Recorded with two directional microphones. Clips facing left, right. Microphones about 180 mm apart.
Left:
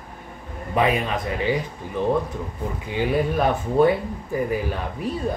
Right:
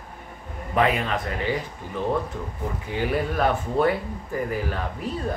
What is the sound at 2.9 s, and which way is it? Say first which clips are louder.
Speech: left 3 dB; 15° left (ahead or behind).